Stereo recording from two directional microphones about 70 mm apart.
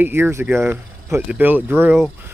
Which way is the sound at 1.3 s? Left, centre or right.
Right.